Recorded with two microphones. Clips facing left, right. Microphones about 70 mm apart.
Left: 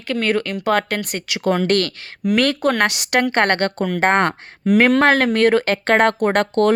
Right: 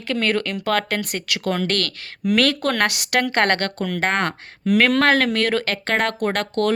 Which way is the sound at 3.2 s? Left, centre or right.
Centre.